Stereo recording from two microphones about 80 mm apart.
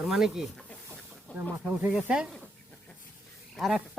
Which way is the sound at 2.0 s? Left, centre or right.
Centre.